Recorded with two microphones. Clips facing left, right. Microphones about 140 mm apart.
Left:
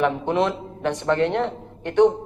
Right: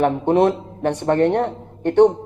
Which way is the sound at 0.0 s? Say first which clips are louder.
Right 5 dB; 50° right (ahead or behind).